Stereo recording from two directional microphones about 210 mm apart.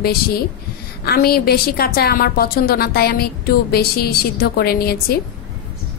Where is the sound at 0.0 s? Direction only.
45° left (ahead or behind).